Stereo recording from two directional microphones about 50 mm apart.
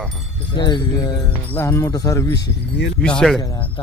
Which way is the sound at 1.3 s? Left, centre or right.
Left.